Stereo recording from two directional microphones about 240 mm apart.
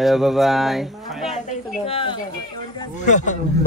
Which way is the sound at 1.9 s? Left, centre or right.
Left.